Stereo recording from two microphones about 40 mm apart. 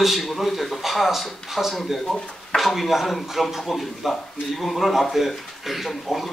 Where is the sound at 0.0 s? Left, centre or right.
Centre.